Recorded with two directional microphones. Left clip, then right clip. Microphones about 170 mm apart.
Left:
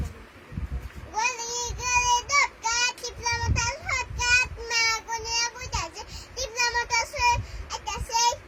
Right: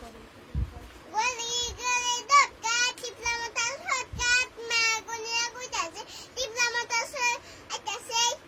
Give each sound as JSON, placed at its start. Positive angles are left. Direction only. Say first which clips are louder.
{"t": 1.1, "sound": "child singing", "louder": "left 1 dB", "side_deg": -15}
{"t": 6.3, "sound": "child singing", "louder": "left 2 dB", "side_deg": -15}